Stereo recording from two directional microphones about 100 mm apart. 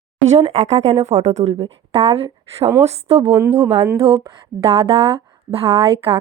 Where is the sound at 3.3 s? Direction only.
20° right (ahead or behind).